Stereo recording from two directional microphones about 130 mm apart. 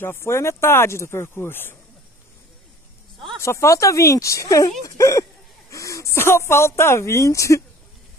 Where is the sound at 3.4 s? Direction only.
20° left (ahead or behind).